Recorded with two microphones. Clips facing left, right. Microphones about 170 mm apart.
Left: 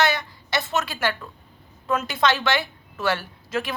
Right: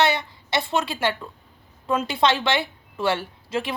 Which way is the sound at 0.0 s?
25° right (ahead or behind).